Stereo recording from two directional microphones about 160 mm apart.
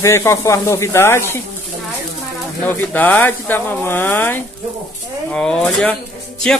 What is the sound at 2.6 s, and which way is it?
Speech, 10° left (ahead or behind).